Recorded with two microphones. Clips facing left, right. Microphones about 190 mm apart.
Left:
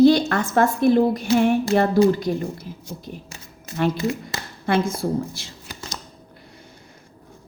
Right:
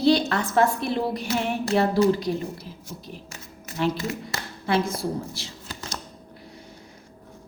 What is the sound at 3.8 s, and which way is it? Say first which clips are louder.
A woman's voice: left 4 dB; 55° left (ahead or behind).